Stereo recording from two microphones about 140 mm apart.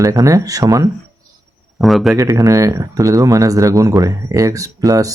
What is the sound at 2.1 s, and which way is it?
Speech, 25° right (ahead or behind).